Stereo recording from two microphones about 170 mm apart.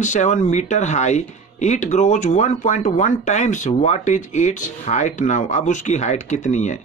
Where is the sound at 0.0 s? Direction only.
45° left (ahead or behind).